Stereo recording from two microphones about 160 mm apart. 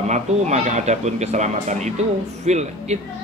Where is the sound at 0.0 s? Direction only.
45° right (ahead or behind).